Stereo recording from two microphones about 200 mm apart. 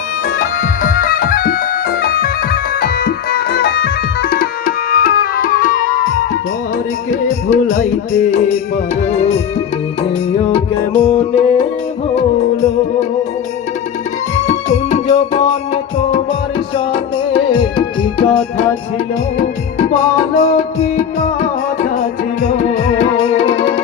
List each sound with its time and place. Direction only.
0.3 s music: 40° left (ahead or behind)
10.9 s music: 25° left (ahead or behind)
14.4 s music: 35° left (ahead or behind)
19.9 s music: 35° left (ahead or behind)
21.9 s music: 40° left (ahead or behind)
23.3 s music: 25° left (ahead or behind)